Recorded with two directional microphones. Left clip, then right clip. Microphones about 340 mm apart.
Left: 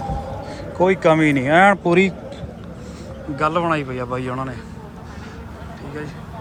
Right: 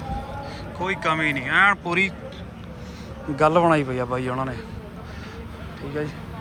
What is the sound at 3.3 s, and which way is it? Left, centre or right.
A man's voice, centre.